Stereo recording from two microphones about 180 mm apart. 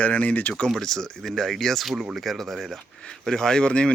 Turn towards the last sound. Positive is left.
turn(degrees=5)  # may be behind; listen again after turning